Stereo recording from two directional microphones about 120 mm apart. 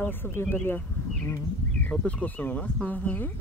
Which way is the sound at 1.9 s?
10° left (ahead or behind).